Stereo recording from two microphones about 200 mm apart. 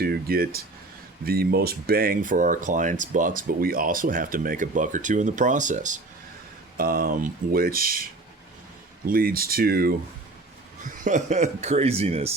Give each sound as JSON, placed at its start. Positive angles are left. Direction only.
{"t": 0.0, "sound": "speech", "side_deg": -50}
{"t": 10.8, "sound": "speech", "side_deg": -40}